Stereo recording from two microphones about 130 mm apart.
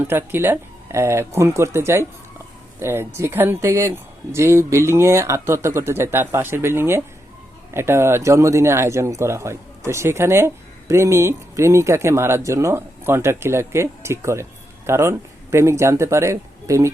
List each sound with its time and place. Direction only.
0.0 s speech: 15° right (ahead or behind)